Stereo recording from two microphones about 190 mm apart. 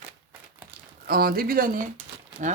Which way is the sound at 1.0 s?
55° right (ahead or behind).